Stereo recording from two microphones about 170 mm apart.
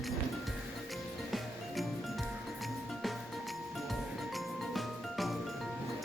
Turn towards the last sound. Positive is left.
turn(degrees=0)  # may be behind; listen again after turning